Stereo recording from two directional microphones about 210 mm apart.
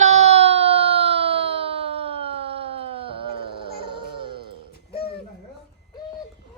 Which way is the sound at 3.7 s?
25° right (ahead or behind).